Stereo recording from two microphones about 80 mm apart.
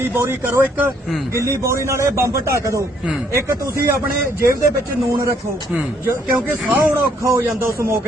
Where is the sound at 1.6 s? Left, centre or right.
Right.